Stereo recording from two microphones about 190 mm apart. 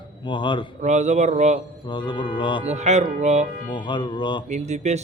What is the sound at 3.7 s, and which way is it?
Mantra, 25° left (ahead or behind).